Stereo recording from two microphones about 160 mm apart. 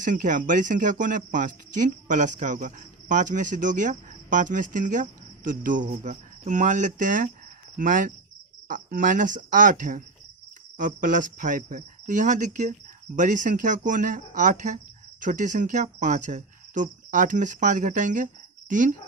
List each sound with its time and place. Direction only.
0.0 s speech: 55° right (ahead or behind)